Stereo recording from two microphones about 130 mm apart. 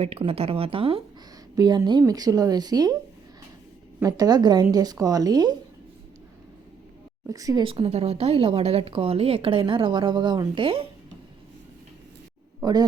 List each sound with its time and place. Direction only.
0.0 s speech: 50° right (ahead or behind)
1.5 s a woman's voice: 30° right (ahead or behind)
4.0 s a woman's voice: 30° right (ahead or behind)
7.3 s a woman's voice: 25° right (ahead or behind)
7.6 s speech: 45° right (ahead or behind)
12.6 s a woman's voice: 30° right (ahead or behind)